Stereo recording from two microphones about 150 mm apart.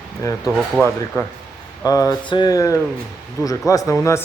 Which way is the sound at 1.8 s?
25° left (ahead or behind).